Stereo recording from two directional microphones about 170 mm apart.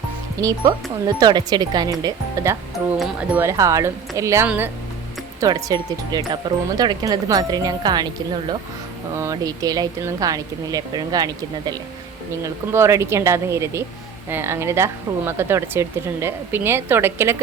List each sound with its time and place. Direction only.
0.4 s speech: 20° right (ahead or behind)
2.7 s speech: centre (ahead or behind)
3.4 s speech: 20° right (ahead or behind)